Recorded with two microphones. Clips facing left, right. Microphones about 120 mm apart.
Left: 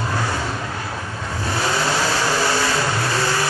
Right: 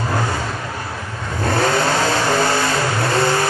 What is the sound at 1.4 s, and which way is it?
Vehicle, 50° right (ahead or behind).